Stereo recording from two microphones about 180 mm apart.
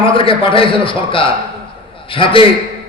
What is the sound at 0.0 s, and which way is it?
A man's voice, 30° left (ahead or behind).